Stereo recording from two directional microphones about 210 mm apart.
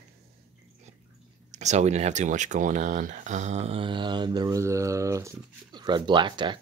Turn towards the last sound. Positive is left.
turn(degrees=-20)  # may be behind; listen again after turning